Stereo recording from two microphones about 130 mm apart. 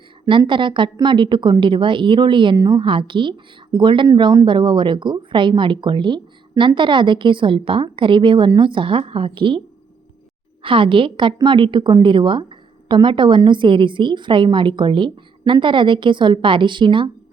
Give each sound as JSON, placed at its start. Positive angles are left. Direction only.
{"t": 0.3, "sound": "a woman's voice", "side_deg": -40}
{"t": 10.6, "sound": "a woman's voice", "side_deg": -40}